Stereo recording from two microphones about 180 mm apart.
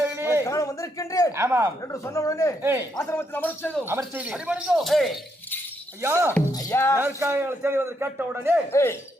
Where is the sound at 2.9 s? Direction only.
15° left (ahead or behind).